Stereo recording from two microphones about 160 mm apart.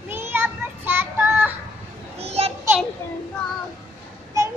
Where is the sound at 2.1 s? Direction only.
40° right (ahead or behind).